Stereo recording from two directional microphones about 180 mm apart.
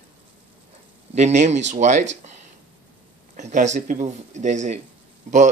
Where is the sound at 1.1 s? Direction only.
40° right (ahead or behind).